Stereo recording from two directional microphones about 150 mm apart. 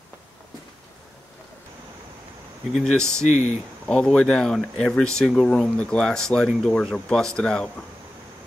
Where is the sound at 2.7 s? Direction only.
5° left (ahead or behind).